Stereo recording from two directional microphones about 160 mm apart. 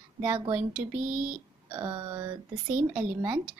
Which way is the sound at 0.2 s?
10° right (ahead or behind).